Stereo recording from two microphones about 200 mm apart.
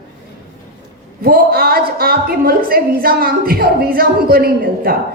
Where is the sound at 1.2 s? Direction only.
50° right (ahead or behind).